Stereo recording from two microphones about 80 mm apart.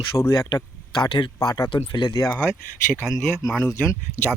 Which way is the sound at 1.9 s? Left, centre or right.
Left.